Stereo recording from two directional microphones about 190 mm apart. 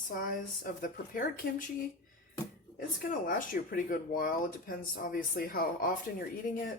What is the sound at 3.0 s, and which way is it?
Speech, 45° left (ahead or behind).